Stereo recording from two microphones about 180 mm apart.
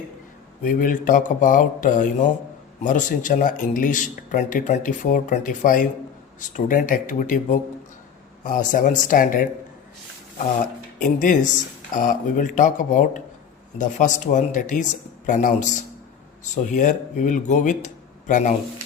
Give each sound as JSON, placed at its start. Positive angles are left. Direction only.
{"t": 0.6, "sound": "speech", "side_deg": 50}
{"t": 11.0, "sound": "speech", "side_deg": 45}